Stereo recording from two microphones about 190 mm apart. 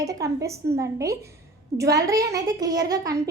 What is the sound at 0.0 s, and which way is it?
A woman's voice, 15° right (ahead or behind).